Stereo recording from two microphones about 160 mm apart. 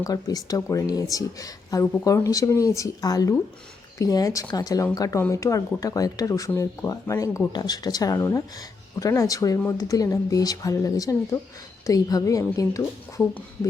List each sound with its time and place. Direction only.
0.0 s speech: 25° left (ahead or behind)